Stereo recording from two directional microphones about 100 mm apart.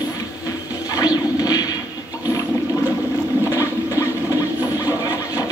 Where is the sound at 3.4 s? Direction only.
30° left (ahead or behind).